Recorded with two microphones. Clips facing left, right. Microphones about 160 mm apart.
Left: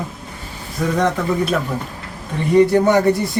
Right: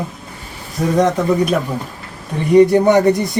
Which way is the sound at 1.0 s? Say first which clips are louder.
Right 5 dB; 15° right (ahead or behind).